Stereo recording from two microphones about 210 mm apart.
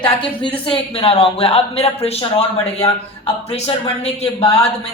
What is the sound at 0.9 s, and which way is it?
A man's voice, 25° left (ahead or behind).